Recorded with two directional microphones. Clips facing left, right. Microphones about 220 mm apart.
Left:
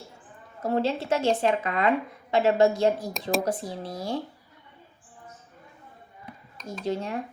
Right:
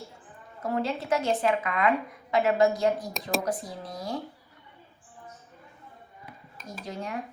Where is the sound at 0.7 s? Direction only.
25° left (ahead or behind).